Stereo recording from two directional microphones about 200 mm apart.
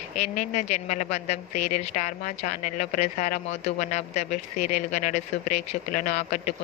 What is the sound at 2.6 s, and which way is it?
Speech, 40° left (ahead or behind).